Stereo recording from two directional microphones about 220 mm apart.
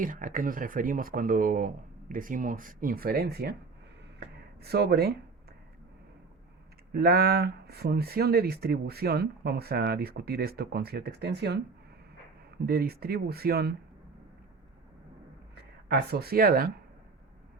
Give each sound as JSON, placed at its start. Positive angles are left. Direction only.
{"t": 0.0, "sound": "speech", "side_deg": -35}
{"t": 6.9, "sound": "speech", "side_deg": -45}
{"t": 15.5, "sound": "speech", "side_deg": -45}